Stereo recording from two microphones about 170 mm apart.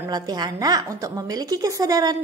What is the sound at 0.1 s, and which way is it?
A woman's voice, 25° right (ahead or behind).